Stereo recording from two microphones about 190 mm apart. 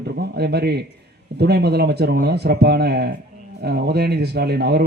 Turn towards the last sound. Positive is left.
turn(degrees=-60)  # may be behind; listen again after turning